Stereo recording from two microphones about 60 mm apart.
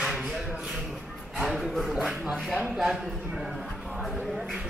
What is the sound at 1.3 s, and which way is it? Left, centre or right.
Speech, centre.